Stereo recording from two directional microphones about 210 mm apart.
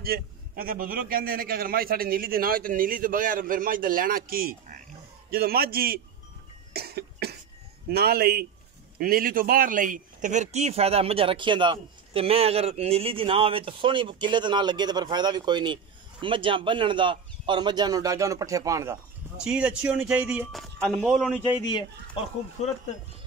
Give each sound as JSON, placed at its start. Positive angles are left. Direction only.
{"t": 0.0, "sound": "a man's voice", "side_deg": -45}
{"t": 6.7, "sound": "cough", "side_deg": -50}
{"t": 7.9, "sound": "a man's voice", "side_deg": -50}
{"t": 21.5, "sound": "speech", "side_deg": 20}